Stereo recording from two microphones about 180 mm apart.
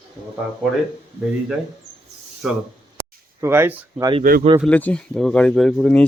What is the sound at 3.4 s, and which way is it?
Speech, 15° right (ahead or behind).